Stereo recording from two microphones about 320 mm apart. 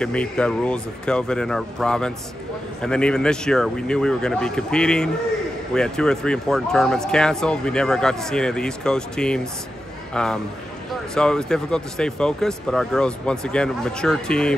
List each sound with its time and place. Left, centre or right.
0.0 s speech: centre